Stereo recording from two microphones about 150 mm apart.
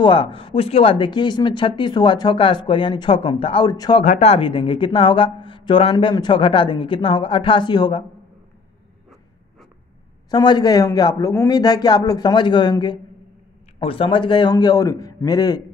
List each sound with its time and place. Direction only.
0.0 s speech: 35° left (ahead or behind)
4.0 s speech: 50° left (ahead or behind); by 8.0 s 30° left (ahead or behind)
10.3 s a man's voice: 30° left (ahead or behind)